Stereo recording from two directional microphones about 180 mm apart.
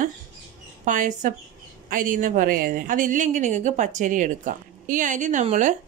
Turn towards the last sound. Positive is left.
turn(degrees=-40)  # may be behind; listen again after turning